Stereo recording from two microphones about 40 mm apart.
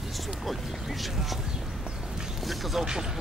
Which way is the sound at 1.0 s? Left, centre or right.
Centre.